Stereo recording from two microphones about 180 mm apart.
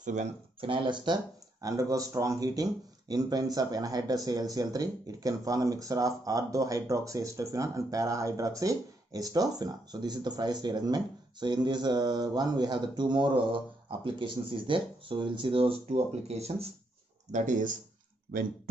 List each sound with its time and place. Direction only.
0.0 s speech: 40° right (ahead or behind)
0.6 s speech: 30° right (ahead or behind); by 17.7 s 45° right (ahead or behind)